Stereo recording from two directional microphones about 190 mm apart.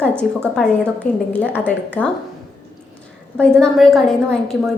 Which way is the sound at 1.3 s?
5° left (ahead or behind).